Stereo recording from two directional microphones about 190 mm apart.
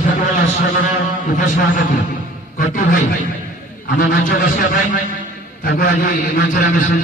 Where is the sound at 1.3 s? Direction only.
45° left (ahead or behind).